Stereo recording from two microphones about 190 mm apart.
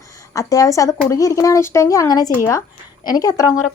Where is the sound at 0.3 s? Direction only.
15° left (ahead or behind).